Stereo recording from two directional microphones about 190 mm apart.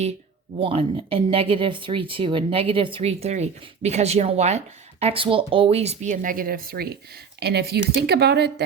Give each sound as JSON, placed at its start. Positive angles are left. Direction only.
{"t": 0.6, "sound": "speech", "side_deg": -30}